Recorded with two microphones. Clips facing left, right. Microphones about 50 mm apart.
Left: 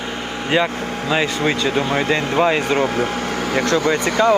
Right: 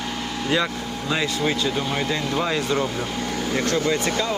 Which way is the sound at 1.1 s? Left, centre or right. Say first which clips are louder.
Left 4 dB; left.